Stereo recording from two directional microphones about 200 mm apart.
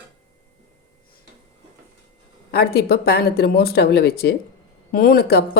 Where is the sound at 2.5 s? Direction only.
50° left (ahead or behind).